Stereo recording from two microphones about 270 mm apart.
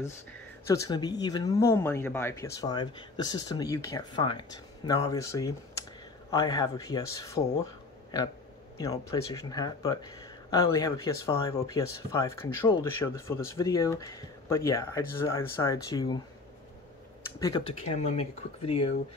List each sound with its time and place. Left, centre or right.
0.7 s speech: centre
17.4 s speech: centre